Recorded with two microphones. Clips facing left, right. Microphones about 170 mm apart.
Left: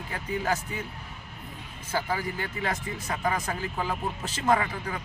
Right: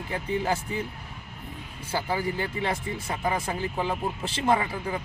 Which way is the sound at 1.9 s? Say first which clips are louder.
Right 2 dB; 30° right (ahead or behind).